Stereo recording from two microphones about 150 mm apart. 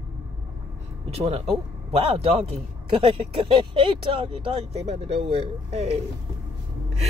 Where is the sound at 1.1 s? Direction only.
45° right (ahead or behind).